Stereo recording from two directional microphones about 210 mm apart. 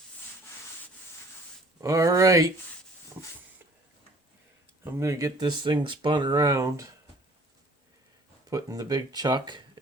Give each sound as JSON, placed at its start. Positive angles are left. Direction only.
{"t": 1.8, "sound": "speech", "side_deg": -15}
{"t": 4.8, "sound": "speech", "side_deg": -10}
{"t": 8.4, "sound": "speech", "side_deg": -15}